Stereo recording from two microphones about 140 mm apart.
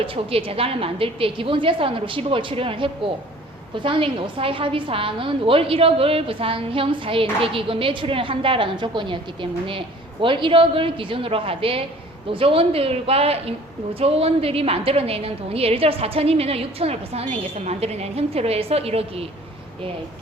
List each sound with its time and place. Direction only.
0.0 s a woman's voice: 40° right (ahead or behind)